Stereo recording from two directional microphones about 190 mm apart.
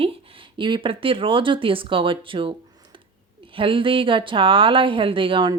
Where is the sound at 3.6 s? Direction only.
25° right (ahead or behind).